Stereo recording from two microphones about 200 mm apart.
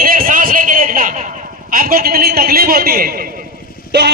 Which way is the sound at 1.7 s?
45° right (ahead or behind).